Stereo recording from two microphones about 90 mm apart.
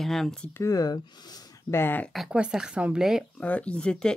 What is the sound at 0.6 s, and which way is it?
Speech, 40° left (ahead or behind).